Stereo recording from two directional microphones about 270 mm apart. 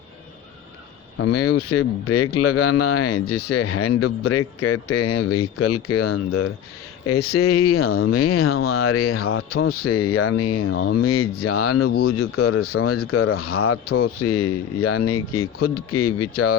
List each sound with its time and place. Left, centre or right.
1.2 s speech: left
15.5 s speech: left
15.9 s speech: left